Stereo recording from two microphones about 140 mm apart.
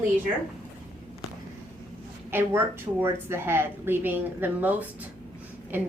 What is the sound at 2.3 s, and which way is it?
A woman's voice, 15° right (ahead or behind).